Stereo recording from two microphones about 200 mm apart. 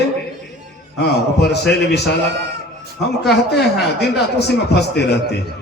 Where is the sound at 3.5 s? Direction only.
55° left (ahead or behind).